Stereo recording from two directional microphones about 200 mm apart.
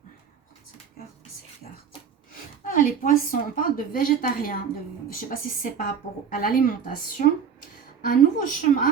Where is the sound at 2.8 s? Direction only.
45° left (ahead or behind).